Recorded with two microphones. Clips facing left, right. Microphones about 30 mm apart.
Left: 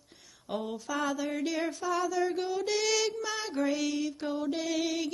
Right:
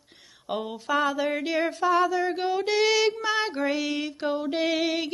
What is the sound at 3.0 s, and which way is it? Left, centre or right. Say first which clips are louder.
Child singing: right 8 dB; right.